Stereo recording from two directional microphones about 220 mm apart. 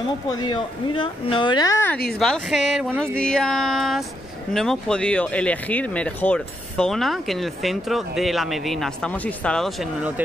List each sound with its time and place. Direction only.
0.3 s speech: 20° left (ahead or behind)
2.0 s speech: centre (ahead or behind)